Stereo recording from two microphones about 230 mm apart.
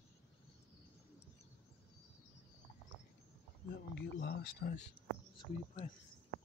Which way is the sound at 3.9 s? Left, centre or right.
Left.